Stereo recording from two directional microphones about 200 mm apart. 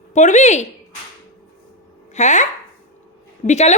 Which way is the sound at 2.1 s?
35° left (ahead or behind).